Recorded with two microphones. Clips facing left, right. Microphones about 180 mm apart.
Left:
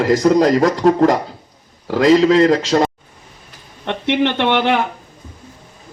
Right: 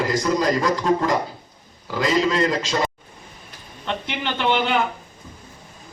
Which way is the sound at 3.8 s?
70° left (ahead or behind).